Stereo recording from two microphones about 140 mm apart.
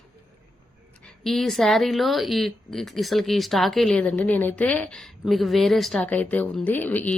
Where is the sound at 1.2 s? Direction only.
Centre (ahead or behind).